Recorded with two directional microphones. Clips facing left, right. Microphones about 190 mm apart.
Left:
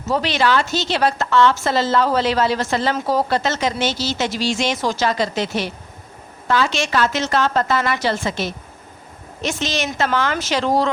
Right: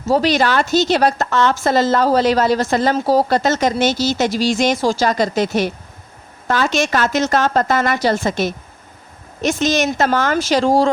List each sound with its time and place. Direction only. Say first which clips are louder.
0.0 s a woman's voice: right 4 dB; 35° right (ahead or behind)
10.3 s speech: right 5 dB; 35° right (ahead or behind)